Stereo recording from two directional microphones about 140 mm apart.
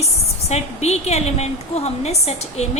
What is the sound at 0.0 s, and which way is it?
A woman's voice, 50° left (ahead or behind).